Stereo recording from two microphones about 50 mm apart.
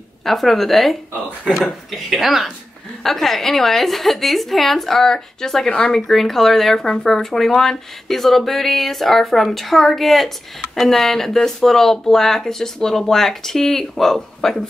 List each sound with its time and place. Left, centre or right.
0.2 s speech: centre
5.7 s speech: left
5.9 s speech: centre